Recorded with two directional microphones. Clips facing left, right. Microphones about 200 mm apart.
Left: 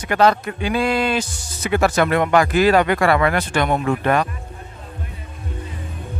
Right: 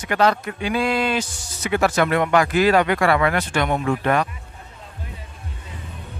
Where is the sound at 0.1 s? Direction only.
40° left (ahead or behind).